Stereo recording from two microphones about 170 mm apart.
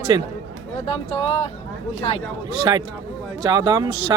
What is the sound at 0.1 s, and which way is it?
Speech, 25° right (ahead or behind).